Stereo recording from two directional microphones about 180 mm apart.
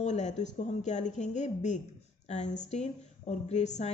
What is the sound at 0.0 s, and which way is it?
A woman's voice, 40° left (ahead or behind).